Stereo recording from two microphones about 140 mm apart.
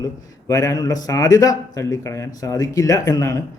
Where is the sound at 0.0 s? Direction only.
25° left (ahead or behind).